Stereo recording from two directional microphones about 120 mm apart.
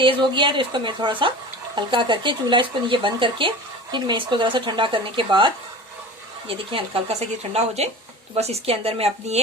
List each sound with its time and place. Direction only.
0.0 s speech: 45° right (ahead or behind)
6.5 s speech: 50° right (ahead or behind)